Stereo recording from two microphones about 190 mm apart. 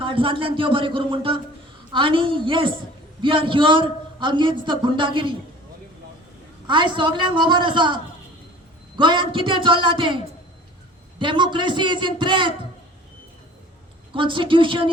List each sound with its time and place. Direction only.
0.0 s a man's voice: 25° right (ahead or behind)
6.7 s a man's voice: 25° right (ahead or behind)
11.2 s a man's voice: 25° right (ahead or behind)
14.1 s a man's voice: 25° right (ahead or behind)